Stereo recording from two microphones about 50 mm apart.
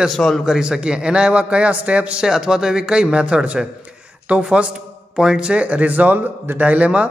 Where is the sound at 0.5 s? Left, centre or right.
Centre.